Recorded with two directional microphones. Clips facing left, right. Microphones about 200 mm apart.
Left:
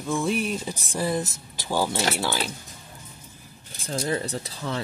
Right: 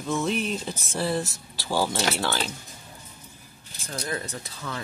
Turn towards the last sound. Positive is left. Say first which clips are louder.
# left 5 dB
turn(degrees=30)  # may be behind; listen again after turning